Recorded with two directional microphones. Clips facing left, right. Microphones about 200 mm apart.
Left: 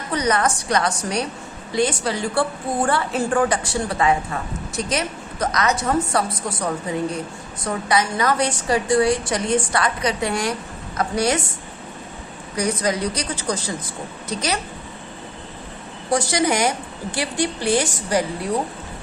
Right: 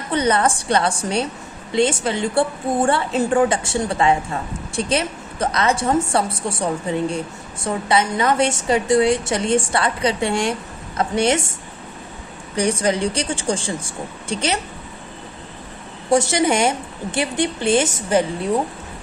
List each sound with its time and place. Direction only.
0.1 s a woman's voice: 30° right (ahead or behind)
12.5 s a woman's voice: 30° right (ahead or behind)
16.0 s a woman's voice: 25° right (ahead or behind)